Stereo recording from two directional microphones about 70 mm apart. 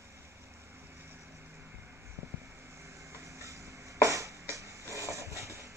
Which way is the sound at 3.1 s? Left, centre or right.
Right.